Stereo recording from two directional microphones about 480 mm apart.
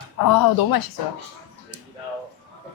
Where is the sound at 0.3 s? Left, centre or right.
Left.